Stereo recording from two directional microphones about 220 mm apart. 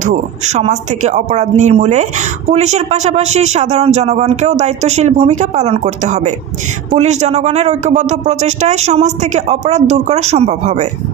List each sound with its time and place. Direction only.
0.0 s speech: 35° right (ahead or behind)